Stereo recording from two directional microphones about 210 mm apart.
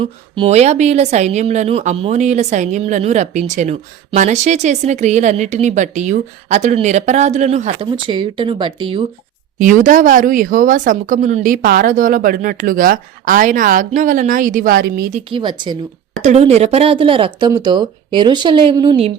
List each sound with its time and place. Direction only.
0.0 s a woman's voice: 25° right (ahead or behind)
9.6 s a woman's voice: 40° right (ahead or behind)
15.3 s speech: 20° right (ahead or behind)
16.2 s speech: 30° right (ahead or behind)